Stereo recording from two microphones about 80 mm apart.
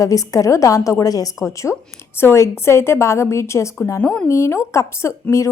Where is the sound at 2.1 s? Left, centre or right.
Left.